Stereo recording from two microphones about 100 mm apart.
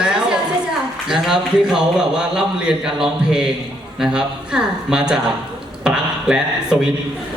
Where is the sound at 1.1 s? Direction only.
5° right (ahead or behind).